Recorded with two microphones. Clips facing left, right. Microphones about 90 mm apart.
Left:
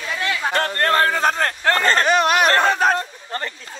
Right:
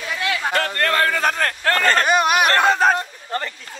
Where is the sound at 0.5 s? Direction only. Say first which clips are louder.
Left 3 dB; 35° left (ahead or behind).